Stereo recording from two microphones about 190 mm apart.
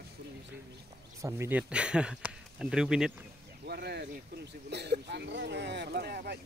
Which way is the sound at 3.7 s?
55° right (ahead or behind).